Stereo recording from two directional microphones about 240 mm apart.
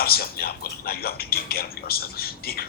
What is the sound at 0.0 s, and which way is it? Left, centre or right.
Speech, left.